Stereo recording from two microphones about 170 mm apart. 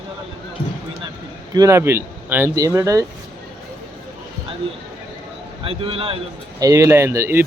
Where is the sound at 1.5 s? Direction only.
20° right (ahead or behind).